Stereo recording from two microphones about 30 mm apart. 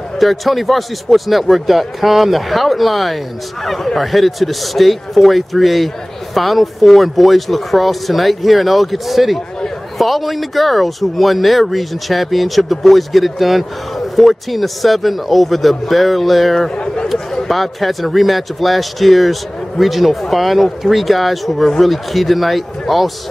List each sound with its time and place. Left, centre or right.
0.2 s speech: centre
16.7 s a sound: left
17.5 s speech: centre